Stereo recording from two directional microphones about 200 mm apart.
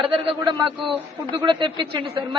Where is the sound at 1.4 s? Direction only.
25° right (ahead or behind).